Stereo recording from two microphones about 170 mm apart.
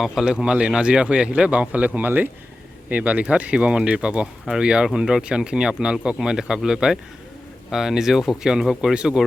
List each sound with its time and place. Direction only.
0.0 s speech: 5° right (ahead or behind)